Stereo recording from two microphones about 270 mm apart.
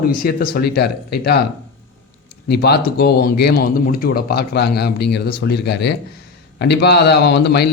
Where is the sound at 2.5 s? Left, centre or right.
Left.